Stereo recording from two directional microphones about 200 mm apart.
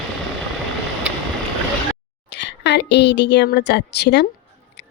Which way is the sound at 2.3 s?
60° left (ahead or behind).